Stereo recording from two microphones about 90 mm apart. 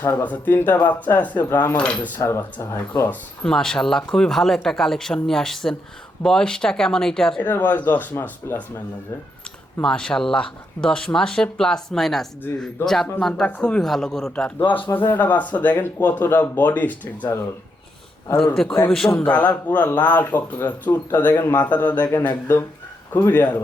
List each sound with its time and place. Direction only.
0.0 s speech: 20° left (ahead or behind)
1.7 s speech: 15° left (ahead or behind)
2.2 s speech: 30° left (ahead or behind)
2.9 s speech: 20° left (ahead or behind)
3.4 s speech: 5° left (ahead or behind)
7.4 s speech: 20° left (ahead or behind)
9.8 s speech: 10° left (ahead or behind)
14.9 s speech: 20° left (ahead or behind)
18.9 s speech: 5° left (ahead or behind)
19.1 s speech: 15° left (ahead or behind)